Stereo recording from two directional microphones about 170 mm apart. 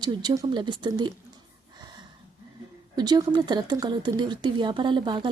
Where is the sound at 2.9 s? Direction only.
25° right (ahead or behind).